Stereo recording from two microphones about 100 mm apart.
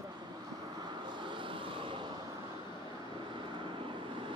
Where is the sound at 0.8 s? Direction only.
50° right (ahead or behind).